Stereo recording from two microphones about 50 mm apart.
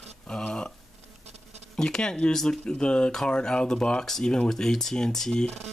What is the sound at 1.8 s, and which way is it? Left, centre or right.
Speech, centre.